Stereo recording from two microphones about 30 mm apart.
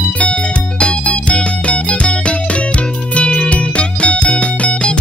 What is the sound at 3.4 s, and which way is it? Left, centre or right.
Music, left.